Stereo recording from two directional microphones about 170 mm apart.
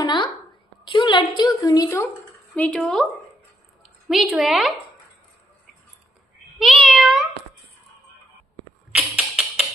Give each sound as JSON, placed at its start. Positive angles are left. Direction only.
{"t": 0.0, "sound": "a sound", "side_deg": 25}
{"t": 0.8, "sound": "a woman's voice", "side_deg": 25}
{"t": 2.5, "sound": "meow", "side_deg": 5}
{"t": 3.8, "sound": "a woman's voice", "side_deg": 0}
{"t": 6.6, "sound": "meow", "side_deg": 0}
{"t": 8.9, "sound": "music", "side_deg": -5}